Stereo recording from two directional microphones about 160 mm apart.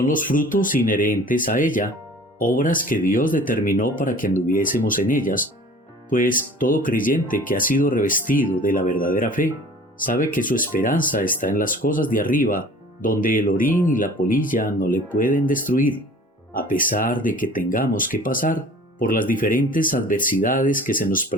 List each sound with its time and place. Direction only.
0.0 s speech: 60° left (ahead or behind)